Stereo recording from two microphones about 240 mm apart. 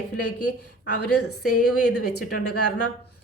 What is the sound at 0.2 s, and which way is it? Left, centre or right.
A woman's voice, left.